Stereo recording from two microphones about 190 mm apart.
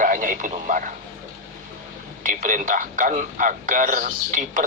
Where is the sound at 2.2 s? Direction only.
45° right (ahead or behind).